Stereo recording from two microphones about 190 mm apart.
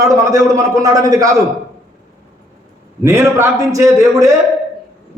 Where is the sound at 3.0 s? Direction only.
15° right (ahead or behind).